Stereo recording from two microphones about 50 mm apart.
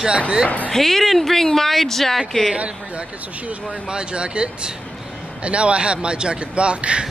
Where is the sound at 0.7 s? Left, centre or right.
Centre.